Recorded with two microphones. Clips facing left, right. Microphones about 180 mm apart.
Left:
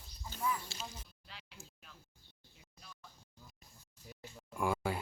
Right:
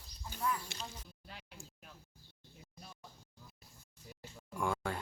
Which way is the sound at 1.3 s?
50° right (ahead or behind).